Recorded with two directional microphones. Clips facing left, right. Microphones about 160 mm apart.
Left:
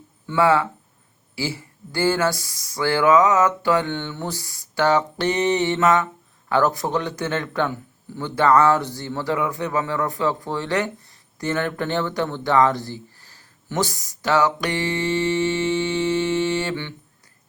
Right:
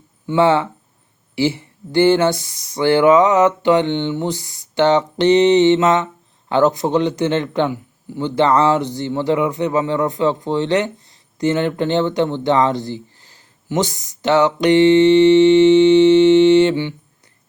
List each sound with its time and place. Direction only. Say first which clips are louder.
0.3 s a man's voice: right 4 dB; 25° right (ahead or behind)